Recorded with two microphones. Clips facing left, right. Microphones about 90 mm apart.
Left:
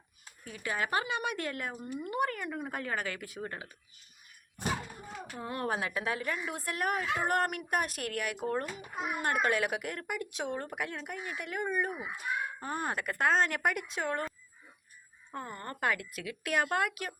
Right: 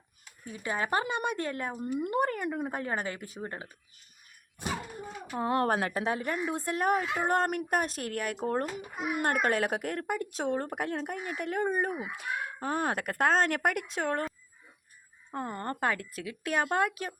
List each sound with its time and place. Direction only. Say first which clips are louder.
0.4 s speech: right 2 dB; 25° right (ahead or behind)
5.3 s speech: right 8 dB; 55° right (ahead or behind)
5.9 s speech: right 3 dB; 30° right (ahead or behind)
9.0 s speech: right 2 dB; 55° right (ahead or behind)
12.2 s speech: left 2 dB; 65° right (ahead or behind); by 14.3 s 50° right (ahead or behind)
15.3 s speech: right 6 dB; 35° right (ahead or behind)